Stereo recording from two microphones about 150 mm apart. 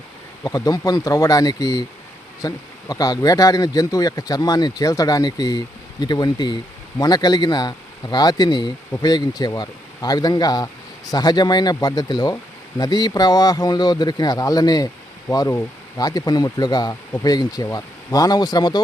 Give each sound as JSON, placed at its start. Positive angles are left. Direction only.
{"t": 0.4, "sound": "speech", "side_deg": 25}